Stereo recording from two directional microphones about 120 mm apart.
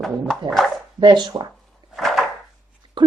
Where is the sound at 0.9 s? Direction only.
35° right (ahead or behind).